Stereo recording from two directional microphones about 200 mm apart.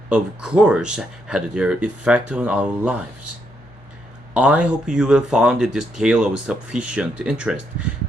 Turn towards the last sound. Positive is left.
turn(degrees=-5)  # may be behind; listen again after turning